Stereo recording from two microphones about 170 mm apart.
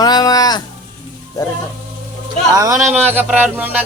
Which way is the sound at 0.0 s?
25° left (ahead or behind).